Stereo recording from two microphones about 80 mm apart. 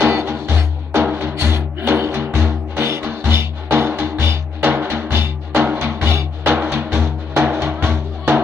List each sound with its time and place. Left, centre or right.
0.0 s music: right